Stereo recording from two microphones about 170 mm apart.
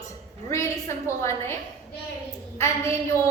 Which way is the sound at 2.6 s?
15° left (ahead or behind).